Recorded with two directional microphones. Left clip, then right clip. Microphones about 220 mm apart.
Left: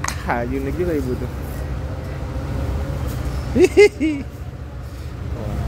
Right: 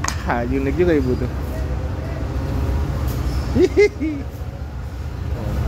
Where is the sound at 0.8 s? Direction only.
15° right (ahead or behind).